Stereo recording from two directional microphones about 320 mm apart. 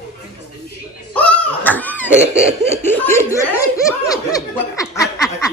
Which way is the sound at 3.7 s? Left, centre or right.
Centre.